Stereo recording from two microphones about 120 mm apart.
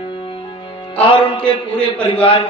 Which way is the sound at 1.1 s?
40° left (ahead or behind).